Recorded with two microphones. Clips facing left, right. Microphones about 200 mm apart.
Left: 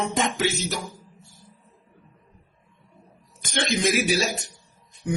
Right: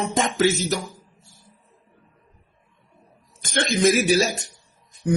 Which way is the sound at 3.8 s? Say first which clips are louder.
Right 6 dB; 45° right (ahead or behind).